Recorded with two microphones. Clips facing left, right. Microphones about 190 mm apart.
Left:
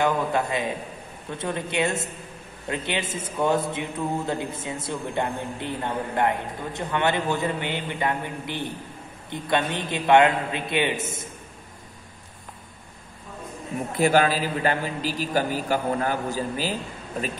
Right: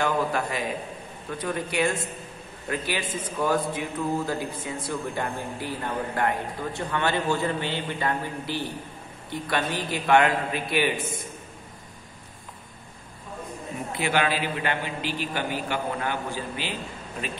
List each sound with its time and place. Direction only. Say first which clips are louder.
0.0 s a man's voice: left 2 dB; 20° left (ahead or behind)
13.9 s a man's voice: left 5 dB; 40° left (ahead or behind)